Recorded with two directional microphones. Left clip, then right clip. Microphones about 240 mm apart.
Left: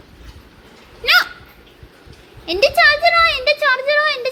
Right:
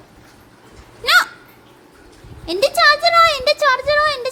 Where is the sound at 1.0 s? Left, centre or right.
Centre.